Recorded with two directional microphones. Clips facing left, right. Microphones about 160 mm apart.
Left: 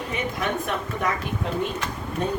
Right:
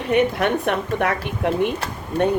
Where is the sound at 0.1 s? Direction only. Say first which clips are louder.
Right 10 dB; 65° right (ahead or behind).